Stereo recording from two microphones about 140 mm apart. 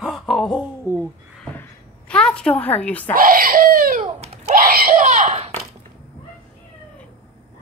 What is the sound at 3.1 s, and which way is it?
Speech, 90° right.